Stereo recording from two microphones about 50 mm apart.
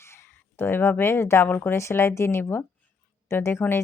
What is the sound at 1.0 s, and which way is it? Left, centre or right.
Speech, left.